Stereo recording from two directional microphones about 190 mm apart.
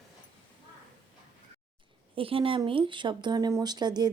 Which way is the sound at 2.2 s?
30° right (ahead or behind).